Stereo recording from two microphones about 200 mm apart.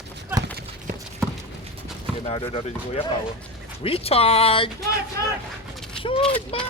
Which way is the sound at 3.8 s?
30° left (ahead or behind).